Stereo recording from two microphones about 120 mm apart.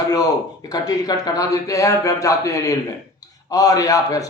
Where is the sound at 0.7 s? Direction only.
35° left (ahead or behind).